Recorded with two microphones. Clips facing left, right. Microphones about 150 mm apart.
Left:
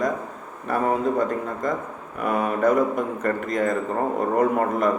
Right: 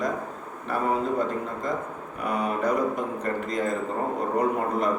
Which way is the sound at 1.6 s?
50° left (ahead or behind).